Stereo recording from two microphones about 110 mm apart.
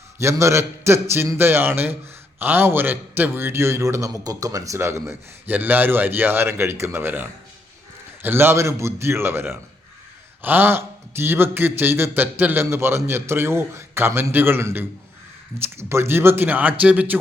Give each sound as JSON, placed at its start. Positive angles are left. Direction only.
{"t": 0.2, "sound": "a man's voice", "side_deg": -25}